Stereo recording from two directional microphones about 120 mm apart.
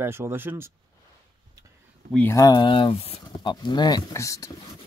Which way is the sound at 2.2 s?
30° left (ahead or behind).